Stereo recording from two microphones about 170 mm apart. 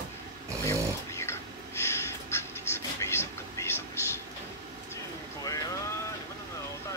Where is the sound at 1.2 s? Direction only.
15° left (ahead or behind).